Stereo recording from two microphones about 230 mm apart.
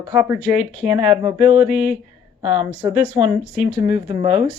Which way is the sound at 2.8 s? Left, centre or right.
Centre.